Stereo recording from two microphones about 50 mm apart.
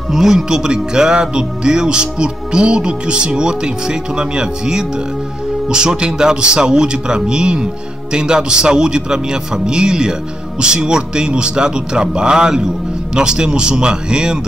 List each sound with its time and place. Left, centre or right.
0.1 s speech: centre